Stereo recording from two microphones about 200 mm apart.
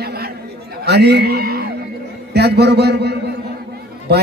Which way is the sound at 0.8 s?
55° right (ahead or behind).